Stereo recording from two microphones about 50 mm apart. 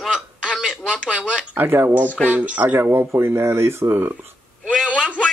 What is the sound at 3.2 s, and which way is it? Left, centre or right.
Speech, right.